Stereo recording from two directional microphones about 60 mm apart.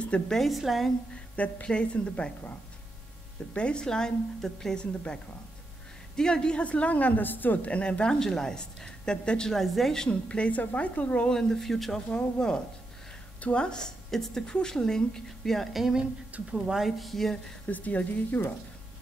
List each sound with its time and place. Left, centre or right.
0.3 s a woman's voice: centre
1.3 s a woman's voice: left
3.5 s a woman's voice: centre
9.5 s a woman's voice: centre
10.0 s a woman's voice: centre
11.2 s a woman's voice: centre
17.0 s a woman's voice: centre
17.6 s a woman's voice: left